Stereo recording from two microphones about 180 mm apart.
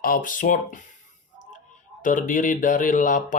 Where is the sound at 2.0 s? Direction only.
45° left (ahead or behind).